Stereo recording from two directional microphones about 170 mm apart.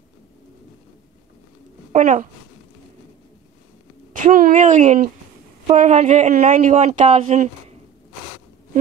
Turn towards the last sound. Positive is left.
turn(degrees=-45)  # may be behind; listen again after turning